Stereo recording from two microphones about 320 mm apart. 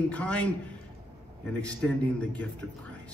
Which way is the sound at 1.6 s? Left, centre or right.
Centre.